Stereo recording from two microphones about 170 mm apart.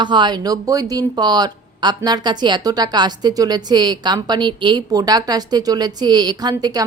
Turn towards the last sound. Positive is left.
turn(degrees=-25)  # may be behind; listen again after turning